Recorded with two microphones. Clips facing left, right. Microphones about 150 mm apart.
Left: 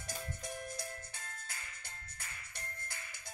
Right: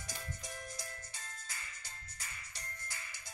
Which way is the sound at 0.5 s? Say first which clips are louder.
Left 4 dB; 55° left (ahead or behind).